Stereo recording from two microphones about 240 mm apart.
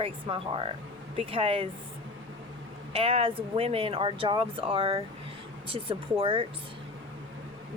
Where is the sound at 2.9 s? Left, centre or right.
Right.